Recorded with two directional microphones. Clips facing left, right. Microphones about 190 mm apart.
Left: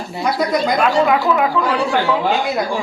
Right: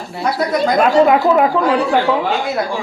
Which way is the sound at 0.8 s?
40° right (ahead or behind).